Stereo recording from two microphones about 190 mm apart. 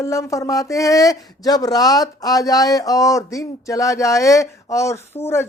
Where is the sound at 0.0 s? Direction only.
15° left (ahead or behind).